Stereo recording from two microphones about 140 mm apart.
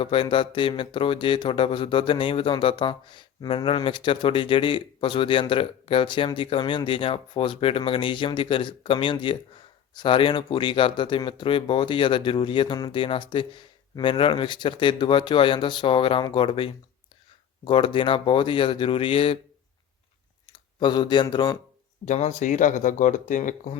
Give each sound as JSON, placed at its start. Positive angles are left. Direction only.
{"t": 0.0, "sound": "speech", "side_deg": 40}
{"t": 20.5, "sound": "speech", "side_deg": 30}
{"t": 22.0, "sound": "speech", "side_deg": 55}